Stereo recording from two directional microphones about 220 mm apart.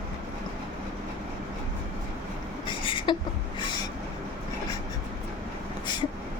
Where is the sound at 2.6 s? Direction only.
25° left (ahead or behind).